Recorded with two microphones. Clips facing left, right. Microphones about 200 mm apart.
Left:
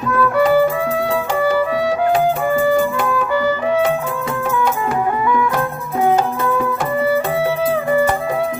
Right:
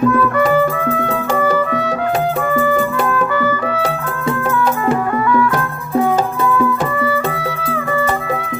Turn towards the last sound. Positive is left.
turn(degrees=25)  # may be behind; listen again after turning